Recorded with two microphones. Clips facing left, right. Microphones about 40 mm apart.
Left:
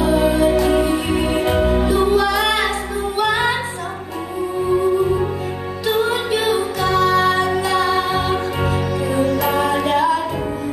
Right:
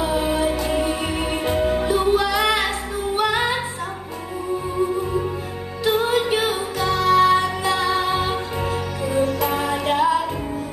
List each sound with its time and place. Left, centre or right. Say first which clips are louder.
0.2 s music: left 6 dB; centre
6.5 s music: left 4 dB; centre
9.1 s music: left 2 dB; centre
9.8 s music: left 2 dB; centre